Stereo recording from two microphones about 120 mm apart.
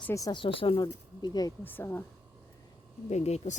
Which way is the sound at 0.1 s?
30° left (ahead or behind).